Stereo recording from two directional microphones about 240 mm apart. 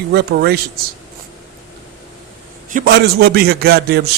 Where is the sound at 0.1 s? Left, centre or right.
Right.